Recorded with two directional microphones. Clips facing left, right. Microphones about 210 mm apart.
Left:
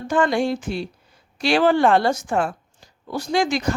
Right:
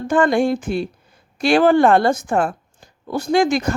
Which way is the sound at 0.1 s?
50° right (ahead or behind).